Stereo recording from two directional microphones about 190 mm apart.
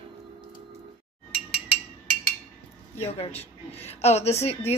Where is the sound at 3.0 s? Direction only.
30° left (ahead or behind).